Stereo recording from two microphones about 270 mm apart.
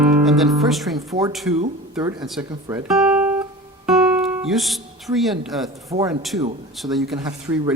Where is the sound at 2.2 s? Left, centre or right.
Centre.